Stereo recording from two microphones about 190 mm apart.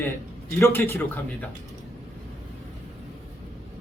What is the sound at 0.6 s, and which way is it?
Speech, 15° left (ahead or behind).